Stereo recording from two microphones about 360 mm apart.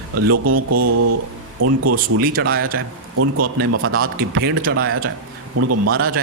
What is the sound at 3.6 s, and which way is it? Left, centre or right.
Speech, right.